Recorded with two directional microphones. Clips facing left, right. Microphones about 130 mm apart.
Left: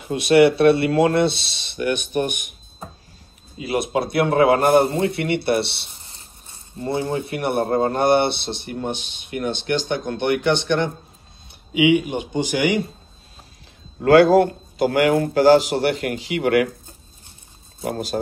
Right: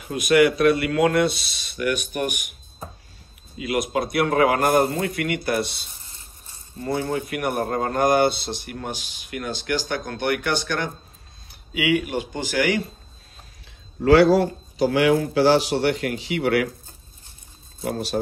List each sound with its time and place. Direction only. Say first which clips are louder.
0.1 s a man's voice: left 3 dB; 30° left (ahead or behind)
3.5 s a man's voice: left 2 dB; 30° left (ahead or behind)
14.0 s a man's voice: left 2 dB; 50° left (ahead or behind)
17.8 s a man's voice: left 1 dB; 45° left (ahead or behind)